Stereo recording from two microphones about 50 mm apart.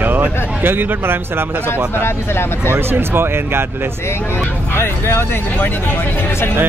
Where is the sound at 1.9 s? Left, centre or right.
Left.